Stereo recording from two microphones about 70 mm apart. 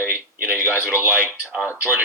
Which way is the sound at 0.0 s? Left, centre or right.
Right.